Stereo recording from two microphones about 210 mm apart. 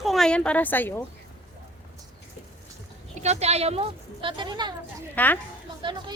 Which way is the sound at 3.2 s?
30° right (ahead or behind).